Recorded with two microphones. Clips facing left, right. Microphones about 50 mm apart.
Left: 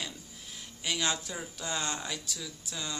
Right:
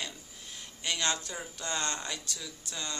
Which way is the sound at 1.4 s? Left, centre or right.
Centre.